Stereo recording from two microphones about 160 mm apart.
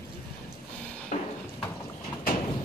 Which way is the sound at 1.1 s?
50° left (ahead or behind).